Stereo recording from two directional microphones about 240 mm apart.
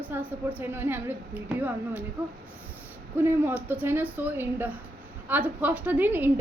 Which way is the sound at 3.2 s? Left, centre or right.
Centre.